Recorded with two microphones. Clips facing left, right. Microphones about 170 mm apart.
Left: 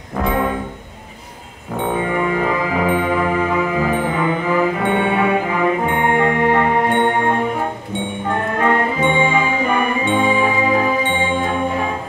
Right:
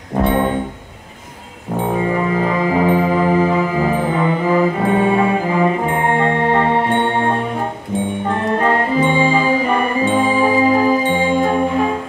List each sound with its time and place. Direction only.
0.2 s music: 30° right (ahead or behind)
1.8 s music: 30° right (ahead or behind)
8.5 s music: 35° right (ahead or behind)